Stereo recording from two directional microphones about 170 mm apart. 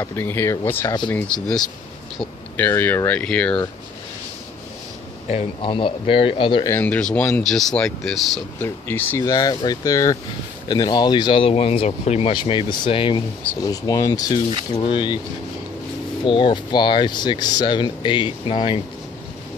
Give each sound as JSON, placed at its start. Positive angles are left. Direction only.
{"t": 0.0, "sound": "speech", "side_deg": 15}
{"t": 5.3, "sound": "speech", "side_deg": 35}
{"t": 6.7, "sound": "speech", "side_deg": 10}
{"t": 16.3, "sound": "speech", "side_deg": 30}